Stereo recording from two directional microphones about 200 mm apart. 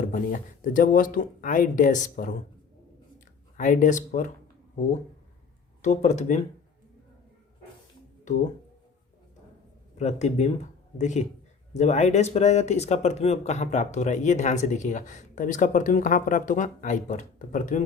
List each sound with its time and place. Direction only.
0.1 s speech: 40° left (ahead or behind)
3.6 s speech: 40° left (ahead or behind)
5.8 s speech: 35° left (ahead or behind)
10.0 s speech: 35° left (ahead or behind)